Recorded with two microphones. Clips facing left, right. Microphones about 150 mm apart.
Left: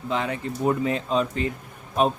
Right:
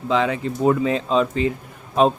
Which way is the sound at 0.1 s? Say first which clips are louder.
Right 6 dB; 90° right.